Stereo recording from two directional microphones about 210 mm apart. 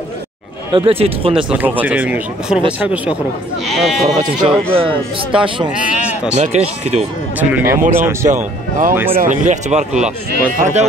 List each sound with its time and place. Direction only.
0.7 s speech: 25° right (ahead or behind)
1.5 s speech: 10° right (ahead or behind)
3.6 s speech: centre (ahead or behind)
4.7 s speech: 25° right (ahead or behind)
7.3 s speech: 10° right (ahead or behind)
8.3 s speech: 35° right (ahead or behind)